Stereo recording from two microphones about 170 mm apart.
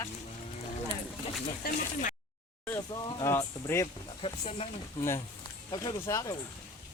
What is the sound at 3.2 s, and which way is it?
Speech, 15° left (ahead or behind).